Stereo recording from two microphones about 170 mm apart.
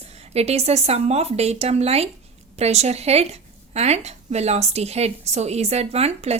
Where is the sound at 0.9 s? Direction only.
40° right (ahead or behind).